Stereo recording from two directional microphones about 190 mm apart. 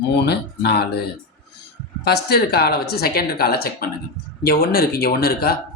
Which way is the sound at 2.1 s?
55° left (ahead or behind).